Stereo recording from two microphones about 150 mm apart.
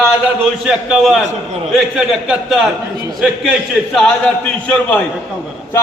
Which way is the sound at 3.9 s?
10° left (ahead or behind).